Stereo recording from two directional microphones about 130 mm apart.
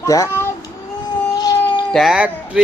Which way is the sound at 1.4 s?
30° left (ahead or behind).